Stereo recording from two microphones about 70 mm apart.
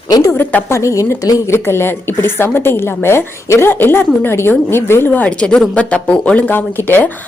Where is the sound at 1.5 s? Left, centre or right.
Left.